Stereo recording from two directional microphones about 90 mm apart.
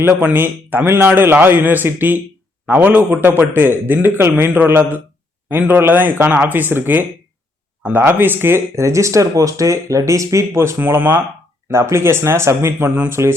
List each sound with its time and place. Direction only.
0.0 s a man's voice: 25° right (ahead or behind)